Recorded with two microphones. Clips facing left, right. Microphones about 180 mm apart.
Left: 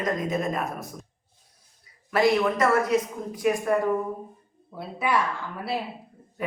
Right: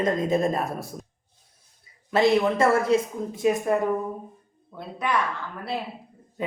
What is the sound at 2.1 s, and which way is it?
Speech, 25° right (ahead or behind).